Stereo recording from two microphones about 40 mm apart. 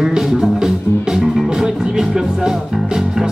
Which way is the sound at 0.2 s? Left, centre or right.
Centre.